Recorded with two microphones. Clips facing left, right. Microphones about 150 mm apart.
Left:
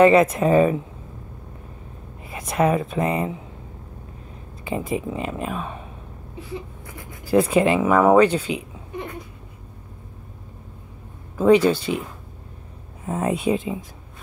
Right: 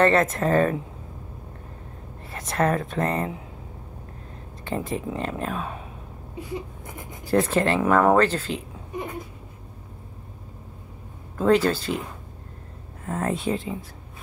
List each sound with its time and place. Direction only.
0.0 s speech: 10° left (ahead or behind)
2.2 s speech: 10° left (ahead or behind)
4.6 s speech: 5° left (ahead or behind)
6.9 s a sound: 20° right (ahead or behind)
7.2 s speech: 10° left (ahead or behind)
11.3 s speech: 10° left (ahead or behind)
13.0 s speech: 15° left (ahead or behind)